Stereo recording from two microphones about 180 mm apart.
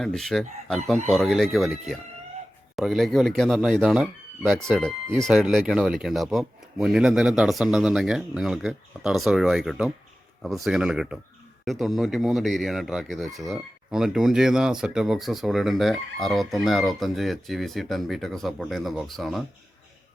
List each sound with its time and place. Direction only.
0.0 s speech: centre (ahead or behind)